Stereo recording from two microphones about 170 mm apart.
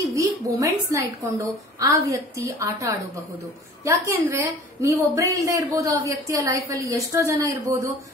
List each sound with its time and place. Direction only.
0.0 s a woman's voice: 20° right (ahead or behind)